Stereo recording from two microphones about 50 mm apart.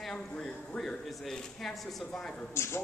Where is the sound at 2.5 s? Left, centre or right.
Left.